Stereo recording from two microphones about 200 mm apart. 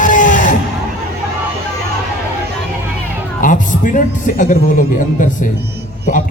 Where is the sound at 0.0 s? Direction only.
40° left (ahead or behind).